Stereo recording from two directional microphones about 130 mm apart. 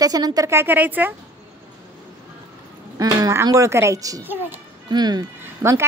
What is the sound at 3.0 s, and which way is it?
A woman's voice, 25° right (ahead or behind).